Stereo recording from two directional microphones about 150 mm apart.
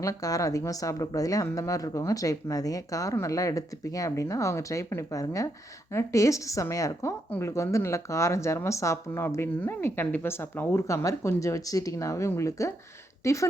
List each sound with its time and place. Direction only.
0.0 s a woman's voice: 25° left (ahead or behind)